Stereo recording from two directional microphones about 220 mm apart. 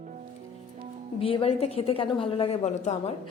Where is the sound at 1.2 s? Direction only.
25° left (ahead or behind).